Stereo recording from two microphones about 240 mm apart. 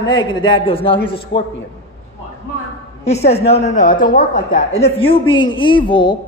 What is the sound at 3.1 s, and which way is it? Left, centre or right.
A man's voice, left.